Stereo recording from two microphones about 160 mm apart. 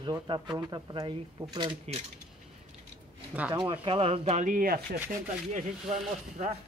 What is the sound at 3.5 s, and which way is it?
Speech, 30° right (ahead or behind).